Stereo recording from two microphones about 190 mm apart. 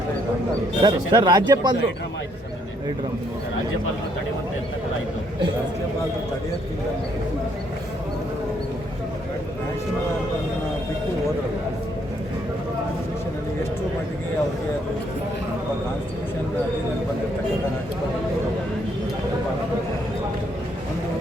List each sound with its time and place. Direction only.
0.8 s speech: 25° right (ahead or behind)